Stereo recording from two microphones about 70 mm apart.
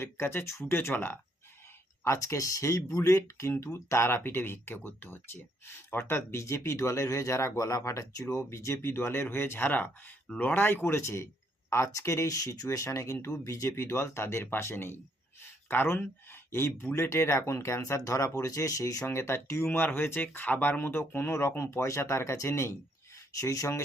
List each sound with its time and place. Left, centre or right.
0.0 s speech: left
2.0 s speech: left
10.2 s speech: centre
10.5 s speech: left
19.0 s speech: left